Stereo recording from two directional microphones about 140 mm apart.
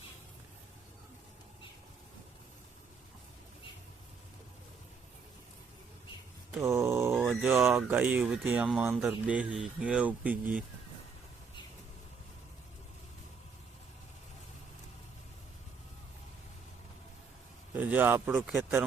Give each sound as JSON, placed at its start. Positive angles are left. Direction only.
{"t": 6.6, "sound": "a sound", "side_deg": -20}
{"t": 7.2, "sound": "speech", "side_deg": -10}
{"t": 17.7, "sound": "a man's voice", "side_deg": -10}